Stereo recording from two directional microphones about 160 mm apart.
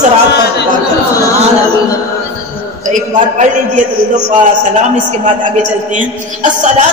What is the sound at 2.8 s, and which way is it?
Speech, 50° right (ahead or behind).